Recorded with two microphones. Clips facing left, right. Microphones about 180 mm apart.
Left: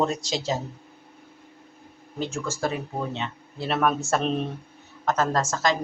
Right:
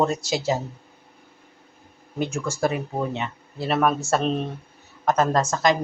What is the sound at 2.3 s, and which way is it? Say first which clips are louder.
Speech: right 4 dB; 15° right (ahead or behind).